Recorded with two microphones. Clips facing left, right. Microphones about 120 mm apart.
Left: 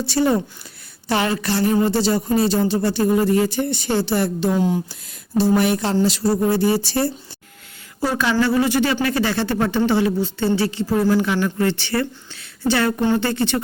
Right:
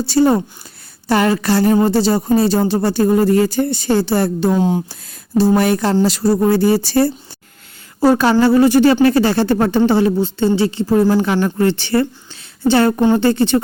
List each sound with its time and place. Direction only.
0.0 s speech: 35° right (ahead or behind)
4.5 s speech: 25° right (ahead or behind)
5.4 s speech: 40° right (ahead or behind)
8.1 s speech: 40° right (ahead or behind)